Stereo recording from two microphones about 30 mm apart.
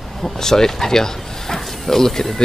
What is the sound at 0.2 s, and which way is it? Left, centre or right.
Speech, centre.